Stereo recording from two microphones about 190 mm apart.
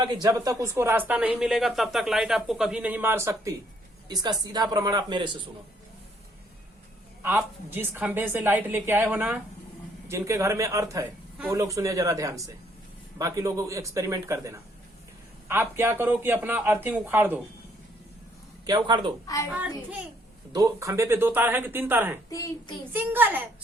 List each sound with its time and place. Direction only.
0.0 s a man's voice: 20° right (ahead or behind)
7.2 s speech: 10° right (ahead or behind)
18.6 s a man's voice: 25° right (ahead or behind)
19.5 s speech: 5° right (ahead or behind)
22.3 s a woman's voice: 15° left (ahead or behind)
22.9 s speech: 10° right (ahead or behind)